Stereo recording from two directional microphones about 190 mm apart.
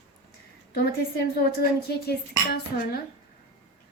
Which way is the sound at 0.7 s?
55° left (ahead or behind).